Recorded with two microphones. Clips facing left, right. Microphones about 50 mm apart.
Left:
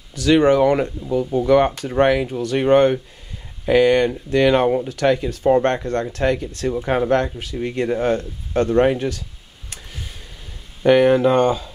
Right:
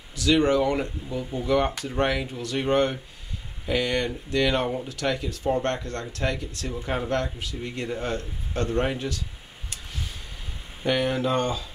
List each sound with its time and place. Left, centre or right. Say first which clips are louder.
0.1 s speech: left 6 dB; left
6.7 s speech: left 9 dB; left
8.7 s speech: left 10 dB; left
10.8 s speech: left 11 dB; left